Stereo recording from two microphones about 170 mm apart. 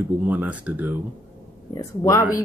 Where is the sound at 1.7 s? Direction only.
15° left (ahead or behind).